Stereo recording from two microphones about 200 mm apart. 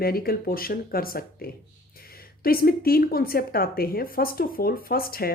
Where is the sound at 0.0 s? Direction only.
50° left (ahead or behind).